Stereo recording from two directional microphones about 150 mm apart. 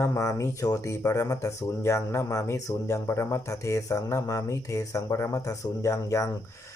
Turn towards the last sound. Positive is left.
turn(degrees=20)  # may be behind; listen again after turning